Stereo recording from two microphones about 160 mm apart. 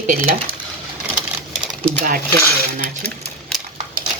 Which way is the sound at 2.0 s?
60° right (ahead or behind).